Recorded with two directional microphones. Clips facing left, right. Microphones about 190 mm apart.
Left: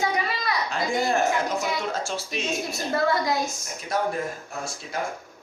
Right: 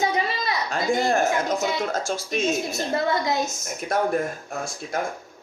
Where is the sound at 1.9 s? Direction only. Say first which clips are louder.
Right 3 dB; 45° right (ahead or behind).